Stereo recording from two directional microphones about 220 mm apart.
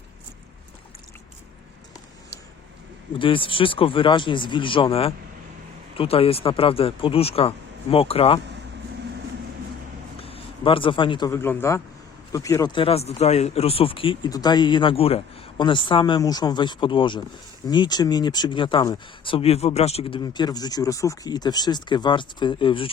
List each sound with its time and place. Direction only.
3.2 s speech: 25° left (ahead or behind)
10.2 s speech: 25° left (ahead or behind)